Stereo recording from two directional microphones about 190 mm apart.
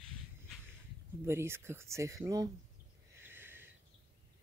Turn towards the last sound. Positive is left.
turn(degrees=-10)  # may be behind; listen again after turning